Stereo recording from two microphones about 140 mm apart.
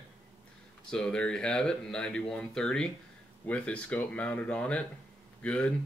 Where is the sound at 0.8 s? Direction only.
5° left (ahead or behind).